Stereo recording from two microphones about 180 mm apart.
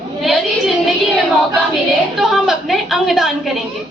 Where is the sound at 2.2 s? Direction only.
Centre (ahead or behind).